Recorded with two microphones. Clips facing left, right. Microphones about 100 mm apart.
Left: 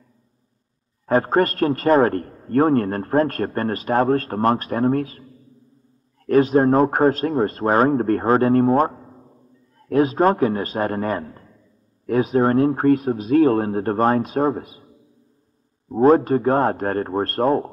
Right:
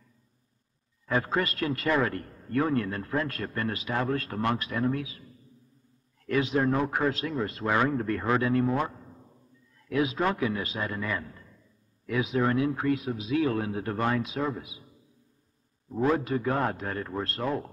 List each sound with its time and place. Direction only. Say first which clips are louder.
1.0 s a man's voice: left 10 dB; 45° left (ahead or behind)
6.2 s a man's voice: left 10 dB; 45° left (ahead or behind)
15.9 s a man's voice: left 11 dB; 40° left (ahead or behind)